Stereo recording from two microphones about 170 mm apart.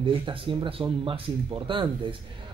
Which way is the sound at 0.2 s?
30° right (ahead or behind).